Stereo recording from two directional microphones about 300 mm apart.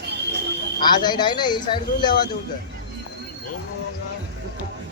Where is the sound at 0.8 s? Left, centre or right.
Centre.